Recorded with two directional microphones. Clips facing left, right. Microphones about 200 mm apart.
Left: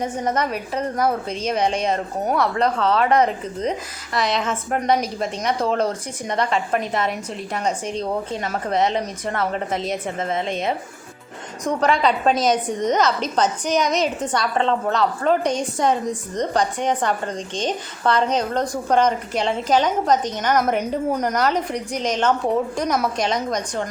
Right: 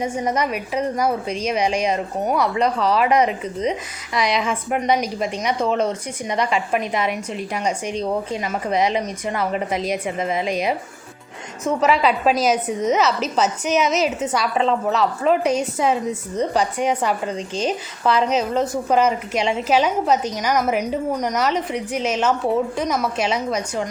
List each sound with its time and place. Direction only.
0.1 s a woman's voice: 10° right (ahead or behind)
1.3 s a woman's voice: 30° left (ahead or behind)
1.9 s a woman's voice: 10° right (ahead or behind)
7.9 s a woman's voice: 30° left (ahead or behind)
8.4 s a woman's voice: 5° right (ahead or behind)
11.6 s a woman's voice: 5° right (ahead or behind)